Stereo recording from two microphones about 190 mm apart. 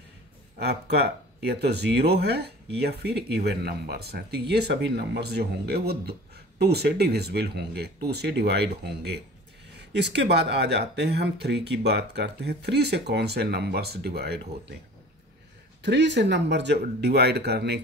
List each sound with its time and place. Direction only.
0.6 s speech: 60° right (ahead or behind)
15.8 s speech: 65° right (ahead or behind)